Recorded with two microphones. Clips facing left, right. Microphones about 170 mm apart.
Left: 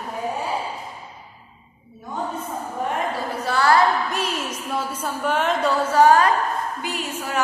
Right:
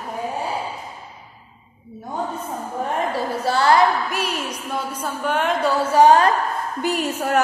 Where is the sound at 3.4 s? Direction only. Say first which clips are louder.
Right 1 dB; 30° right (ahead or behind).